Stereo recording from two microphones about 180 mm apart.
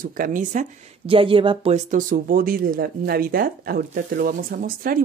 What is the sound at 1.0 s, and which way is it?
Speech, 30° right (ahead or behind).